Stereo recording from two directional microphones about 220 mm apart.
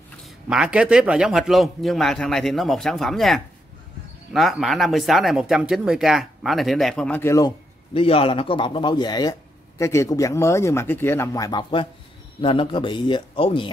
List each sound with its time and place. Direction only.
0.5 s a man's voice: 5° right (ahead or behind); by 13.7 s 25° left (ahead or behind)